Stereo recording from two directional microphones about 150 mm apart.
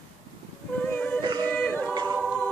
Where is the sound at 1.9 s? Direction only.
30° right (ahead or behind).